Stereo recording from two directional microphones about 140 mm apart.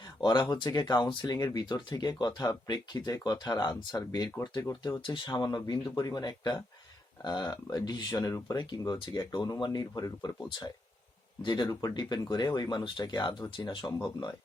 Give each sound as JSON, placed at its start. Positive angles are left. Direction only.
{"t": 0.2, "sound": "speech", "side_deg": 30}
{"t": 11.4, "sound": "speech", "side_deg": 30}